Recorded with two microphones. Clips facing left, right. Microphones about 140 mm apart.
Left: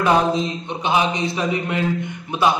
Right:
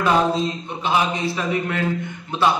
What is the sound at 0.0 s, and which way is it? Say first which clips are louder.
A man's voice: left 1 dB; 20° left (ahead or behind).